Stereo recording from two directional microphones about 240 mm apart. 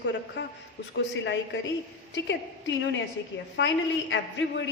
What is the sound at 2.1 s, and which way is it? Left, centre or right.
A woman's voice, left.